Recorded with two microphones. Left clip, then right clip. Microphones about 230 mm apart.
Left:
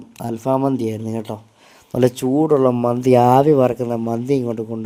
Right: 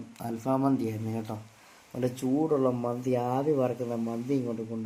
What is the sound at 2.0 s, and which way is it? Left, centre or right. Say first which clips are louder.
A man's voice: left 12 dB; left.